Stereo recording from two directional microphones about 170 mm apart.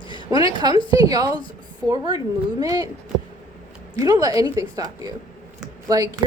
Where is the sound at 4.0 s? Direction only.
20° right (ahead or behind).